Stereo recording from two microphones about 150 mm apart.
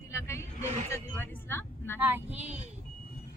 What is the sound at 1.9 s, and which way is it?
Speech, 15° right (ahead or behind).